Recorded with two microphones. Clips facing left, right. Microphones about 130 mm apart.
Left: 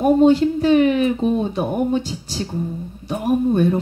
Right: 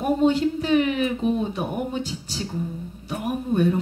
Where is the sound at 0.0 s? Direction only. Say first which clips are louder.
Left 6 dB; 40° left (ahead or behind).